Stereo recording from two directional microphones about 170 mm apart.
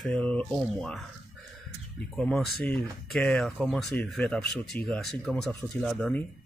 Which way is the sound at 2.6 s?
5° left (ahead or behind).